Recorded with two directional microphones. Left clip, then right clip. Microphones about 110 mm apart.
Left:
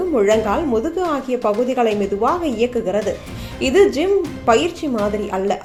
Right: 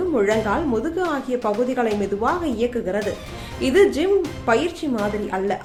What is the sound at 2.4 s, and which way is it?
A woman's voice, 20° left (ahead or behind).